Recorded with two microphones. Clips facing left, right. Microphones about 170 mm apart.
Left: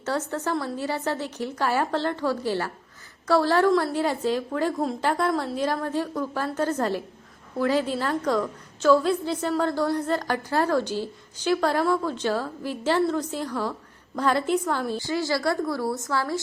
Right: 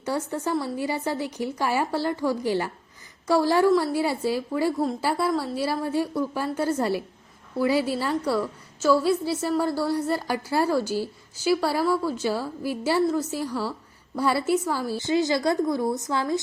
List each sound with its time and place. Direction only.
0.0 s a woman's voice: 10° right (ahead or behind)
14.9 s speech: 20° right (ahead or behind)